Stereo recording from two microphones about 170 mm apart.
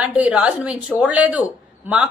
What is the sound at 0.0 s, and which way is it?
A woman's voice, 5° right (ahead or behind).